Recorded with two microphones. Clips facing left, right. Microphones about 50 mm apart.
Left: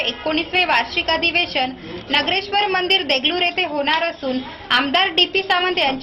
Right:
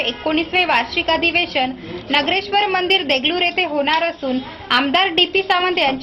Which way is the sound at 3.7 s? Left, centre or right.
Centre.